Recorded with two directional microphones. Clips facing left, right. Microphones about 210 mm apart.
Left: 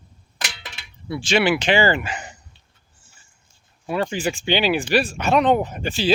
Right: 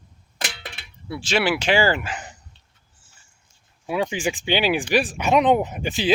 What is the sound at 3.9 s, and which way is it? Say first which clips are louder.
Speech: left 1 dB; 15° right (ahead or behind).